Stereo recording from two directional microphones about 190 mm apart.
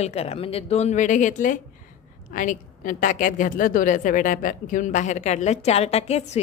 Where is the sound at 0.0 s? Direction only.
35° left (ahead or behind).